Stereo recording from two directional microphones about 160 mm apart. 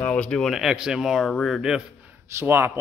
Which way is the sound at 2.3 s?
15° right (ahead or behind).